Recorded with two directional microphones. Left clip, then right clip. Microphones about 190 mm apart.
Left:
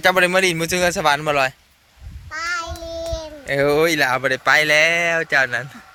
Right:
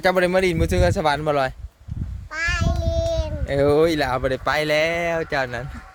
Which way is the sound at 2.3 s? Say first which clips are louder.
Even; 35° right (ahead or behind).